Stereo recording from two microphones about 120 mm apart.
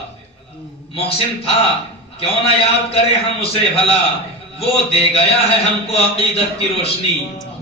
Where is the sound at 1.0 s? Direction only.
50° left (ahead or behind).